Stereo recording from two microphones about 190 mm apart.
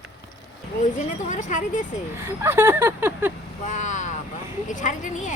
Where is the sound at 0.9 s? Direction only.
40° left (ahead or behind).